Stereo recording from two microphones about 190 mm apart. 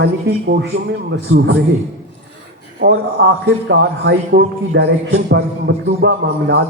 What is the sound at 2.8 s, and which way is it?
Speech, 65° right (ahead or behind).